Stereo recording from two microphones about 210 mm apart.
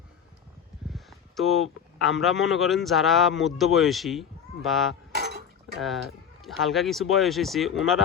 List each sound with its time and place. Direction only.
0.9 s speech: centre (ahead or behind)
5.1 s a sound: 50° right (ahead or behind)
5.8 s speech: centre (ahead or behind)